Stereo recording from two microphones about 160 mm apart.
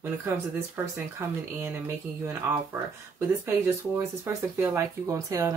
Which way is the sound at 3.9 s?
15° right (ahead or behind).